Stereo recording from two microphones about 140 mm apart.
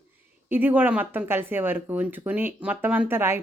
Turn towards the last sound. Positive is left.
turn(degrees=-15)  # may be behind; listen again after turning